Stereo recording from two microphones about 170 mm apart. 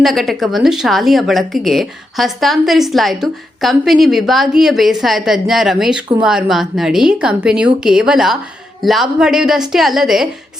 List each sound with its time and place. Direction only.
0.0 s speech: centre (ahead or behind)